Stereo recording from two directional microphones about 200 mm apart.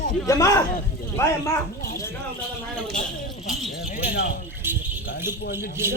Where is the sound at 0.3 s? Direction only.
15° left (ahead or behind).